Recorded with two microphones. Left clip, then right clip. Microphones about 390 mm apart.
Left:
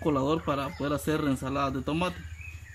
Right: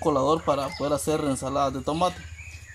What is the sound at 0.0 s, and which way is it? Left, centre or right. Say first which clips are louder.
Speech: right 5 dB; centre.